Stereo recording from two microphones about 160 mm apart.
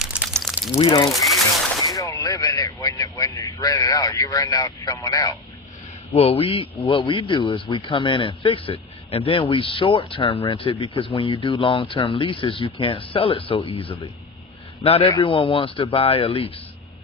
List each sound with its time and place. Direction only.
0.0 s a sound: 5° right (ahead or behind)
0.8 s speech: 30° left (ahead or behind)
1.9 s speech: 20° left (ahead or behind)
6.1 s speech: 35° left (ahead or behind)